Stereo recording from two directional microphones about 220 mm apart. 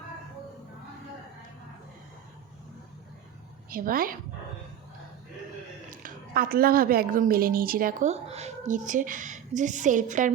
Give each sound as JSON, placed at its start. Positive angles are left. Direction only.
{"t": 3.7, "sound": "speech", "side_deg": -40}
{"t": 5.9, "sound": "speech", "side_deg": -40}